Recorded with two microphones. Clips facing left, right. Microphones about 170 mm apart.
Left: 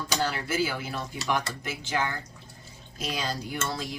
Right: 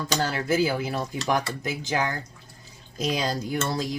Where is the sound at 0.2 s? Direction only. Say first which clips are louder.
Right 5 dB; 40° right (ahead or behind).